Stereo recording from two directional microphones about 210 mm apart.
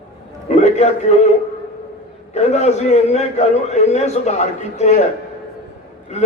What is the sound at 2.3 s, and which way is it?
A man's voice, 30° left (ahead or behind).